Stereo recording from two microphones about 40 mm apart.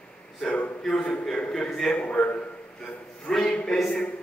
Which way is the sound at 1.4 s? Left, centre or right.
Left.